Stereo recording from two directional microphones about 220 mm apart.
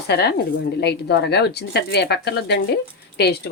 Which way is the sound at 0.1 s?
50° left (ahead or behind).